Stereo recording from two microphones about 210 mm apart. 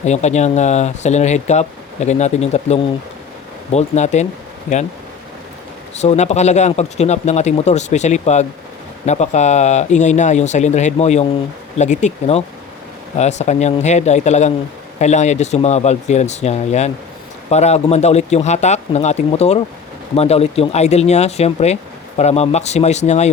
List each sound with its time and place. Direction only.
0.0 s speech: 35° left (ahead or behind)
5.9 s speech: 30° left (ahead or behind)